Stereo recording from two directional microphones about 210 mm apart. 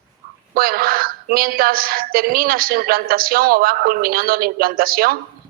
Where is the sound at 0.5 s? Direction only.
45° right (ahead or behind).